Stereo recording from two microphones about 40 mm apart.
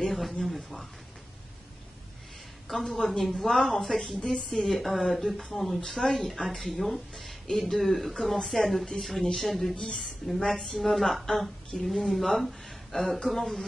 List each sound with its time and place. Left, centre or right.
0.0 s a woman's voice: centre
2.7 s a woman's voice: centre
4.2 s a woman's voice: left
4.5 s a woman's voice: centre